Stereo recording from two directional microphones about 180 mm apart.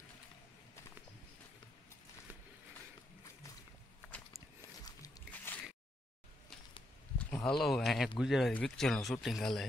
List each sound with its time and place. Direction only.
4.8 s music: 20° left (ahead or behind)
7.2 s speech: 10° left (ahead or behind)